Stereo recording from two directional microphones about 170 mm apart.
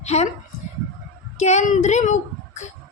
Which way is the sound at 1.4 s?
40° left (ahead or behind).